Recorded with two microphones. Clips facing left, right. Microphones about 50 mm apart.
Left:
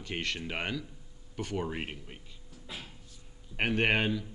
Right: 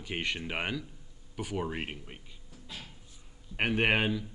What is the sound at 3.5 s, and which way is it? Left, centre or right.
Speech, centre.